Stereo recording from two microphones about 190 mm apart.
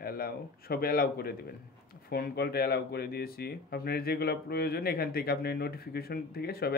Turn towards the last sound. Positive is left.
turn(degrees=55)  # may be behind; listen again after turning